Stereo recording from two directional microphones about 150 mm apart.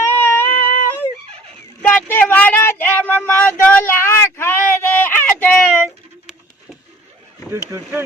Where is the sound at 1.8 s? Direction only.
15° left (ahead or behind).